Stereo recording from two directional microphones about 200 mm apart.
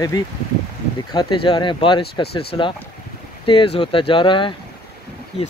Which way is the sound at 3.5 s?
25° left (ahead or behind).